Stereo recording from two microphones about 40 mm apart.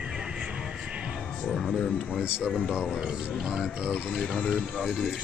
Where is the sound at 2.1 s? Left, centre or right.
Right.